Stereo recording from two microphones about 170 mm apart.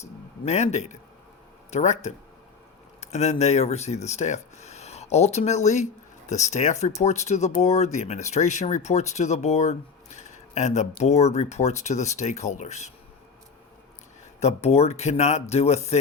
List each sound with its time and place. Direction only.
0.4 s speech: 40° left (ahead or behind)
14.3 s speech: 40° left (ahead or behind)